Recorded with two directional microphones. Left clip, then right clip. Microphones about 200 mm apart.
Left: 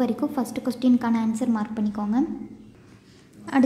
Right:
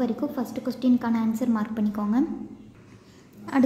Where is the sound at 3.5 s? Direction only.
10° left (ahead or behind).